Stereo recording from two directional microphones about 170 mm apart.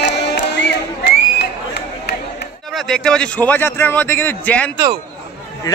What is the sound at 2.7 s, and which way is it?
A man's voice, centre (ahead or behind).